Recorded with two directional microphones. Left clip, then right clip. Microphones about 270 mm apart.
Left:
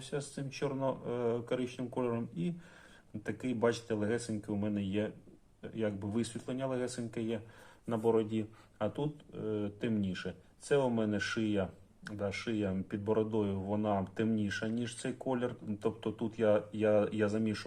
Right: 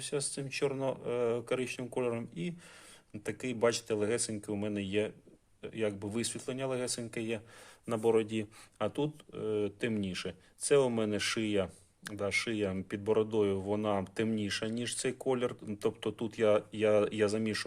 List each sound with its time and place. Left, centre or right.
0.1 s speech: right